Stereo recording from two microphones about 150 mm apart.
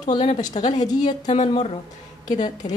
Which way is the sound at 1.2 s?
50° left (ahead or behind).